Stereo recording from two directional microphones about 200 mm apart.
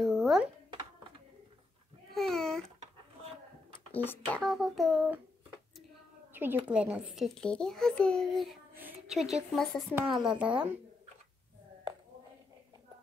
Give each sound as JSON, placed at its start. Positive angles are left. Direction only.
{"t": 0.0, "sound": "a sound", "side_deg": 0}
{"t": 2.1, "sound": "babbling", "side_deg": 0}
{"t": 3.9, "sound": "a child's voice", "side_deg": 10}
{"t": 6.3, "sound": "a child's voice", "side_deg": -10}